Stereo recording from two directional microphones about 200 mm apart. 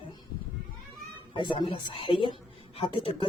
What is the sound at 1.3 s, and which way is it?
A woman's voice, 25° left (ahead or behind).